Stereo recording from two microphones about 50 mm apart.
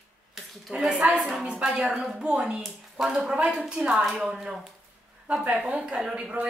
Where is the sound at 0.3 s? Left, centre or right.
Centre.